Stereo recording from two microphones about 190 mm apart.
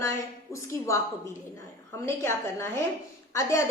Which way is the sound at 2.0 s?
15° left (ahead or behind).